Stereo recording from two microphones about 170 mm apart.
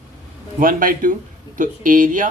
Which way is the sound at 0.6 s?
55° right (ahead or behind).